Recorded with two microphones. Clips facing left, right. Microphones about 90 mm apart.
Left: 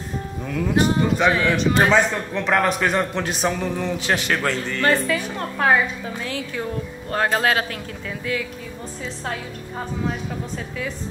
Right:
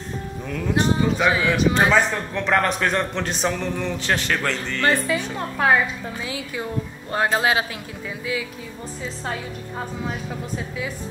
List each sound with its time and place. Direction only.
0.7 s a man's voice: 5° left (ahead or behind)
4.8 s speech: 15° right (ahead or behind)
5.4 s a man's voice: 5° right (ahead or behind)